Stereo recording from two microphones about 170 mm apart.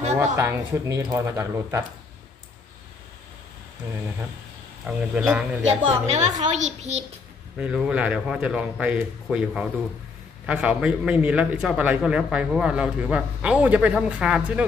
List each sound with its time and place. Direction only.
0.2 s a man's voice: 15° right (ahead or behind)
4.8 s a man's voice: 5° right (ahead or behind)
6.0 s a woman's voice: 40° right (ahead or behind)
7.5 s a man's voice: 5° right (ahead or behind)